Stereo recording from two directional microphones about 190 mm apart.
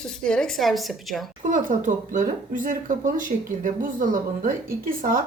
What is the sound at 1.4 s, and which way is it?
Speech, 45° right (ahead or behind).